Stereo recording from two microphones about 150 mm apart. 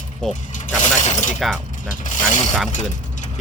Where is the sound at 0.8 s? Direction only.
50° left (ahead or behind).